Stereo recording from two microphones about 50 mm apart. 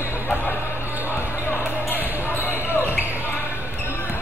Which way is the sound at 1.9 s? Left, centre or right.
Left.